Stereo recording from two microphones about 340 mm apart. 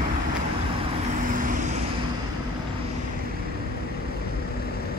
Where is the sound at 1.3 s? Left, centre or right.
Right.